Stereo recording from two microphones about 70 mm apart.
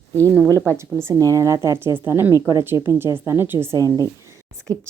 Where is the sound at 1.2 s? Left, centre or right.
Right.